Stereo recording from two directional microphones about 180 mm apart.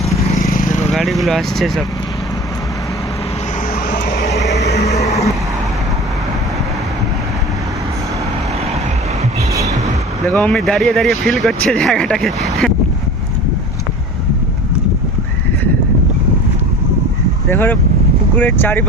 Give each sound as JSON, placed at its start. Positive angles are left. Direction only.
{"t": 0.4, "sound": "vehicle", "side_deg": 50}
{"t": 0.9, "sound": "speech", "side_deg": 0}
{"t": 3.8, "sound": "vehicle", "side_deg": 60}
{"t": 4.5, "sound": "a sound", "side_deg": 65}
{"t": 4.9, "sound": "vehicle", "side_deg": 40}
{"t": 10.2, "sound": "speech", "side_deg": 5}
{"t": 17.5, "sound": "speech", "side_deg": 10}